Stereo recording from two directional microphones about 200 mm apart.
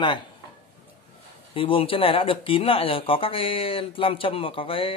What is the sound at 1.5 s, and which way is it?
Speech, 25° left (ahead or behind).